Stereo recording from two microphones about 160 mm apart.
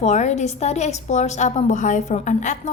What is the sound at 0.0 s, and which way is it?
A woman's voice, 45° left (ahead or behind).